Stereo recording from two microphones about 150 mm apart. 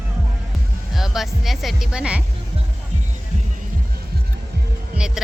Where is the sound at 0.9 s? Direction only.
Centre (ahead or behind).